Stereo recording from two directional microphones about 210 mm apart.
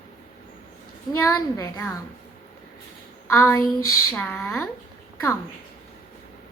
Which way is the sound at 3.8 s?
90° left.